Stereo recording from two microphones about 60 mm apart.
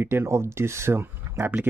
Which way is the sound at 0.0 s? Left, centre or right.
Right.